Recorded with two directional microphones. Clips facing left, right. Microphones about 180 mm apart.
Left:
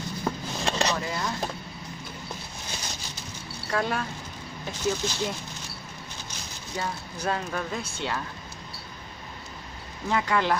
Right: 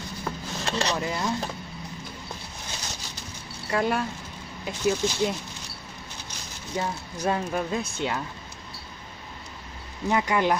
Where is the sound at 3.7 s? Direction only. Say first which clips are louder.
Right 3 dB; 10° right (ahead or behind).